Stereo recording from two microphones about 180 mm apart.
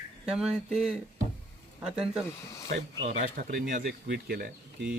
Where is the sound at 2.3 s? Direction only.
15° left (ahead or behind).